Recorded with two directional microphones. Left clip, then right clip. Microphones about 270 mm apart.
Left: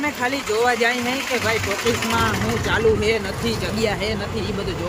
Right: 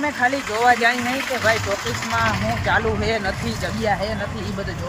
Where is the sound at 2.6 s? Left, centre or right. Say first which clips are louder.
Left 3 dB; centre.